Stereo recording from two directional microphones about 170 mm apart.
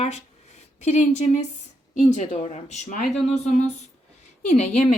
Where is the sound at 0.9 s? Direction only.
45° left (ahead or behind).